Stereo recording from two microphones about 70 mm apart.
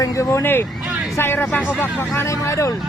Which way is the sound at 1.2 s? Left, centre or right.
Left.